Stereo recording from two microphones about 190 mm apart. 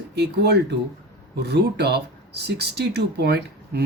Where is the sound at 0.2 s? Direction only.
60° right (ahead or behind).